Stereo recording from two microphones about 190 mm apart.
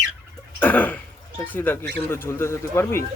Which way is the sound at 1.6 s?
10° left (ahead or behind).